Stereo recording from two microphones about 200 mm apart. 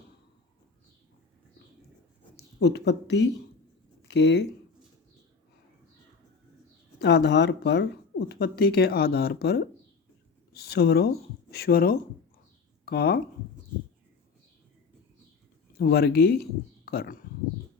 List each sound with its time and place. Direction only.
2.3 s speech: 60° left (ahead or behind)
7.0 s speech: 60° left (ahead or behind)
15.8 s speech: 50° left (ahead or behind)